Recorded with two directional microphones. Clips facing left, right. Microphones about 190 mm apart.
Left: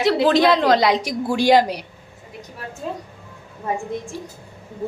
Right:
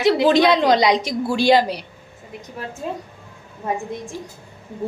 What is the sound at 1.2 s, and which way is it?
Speech, 15° left (ahead or behind).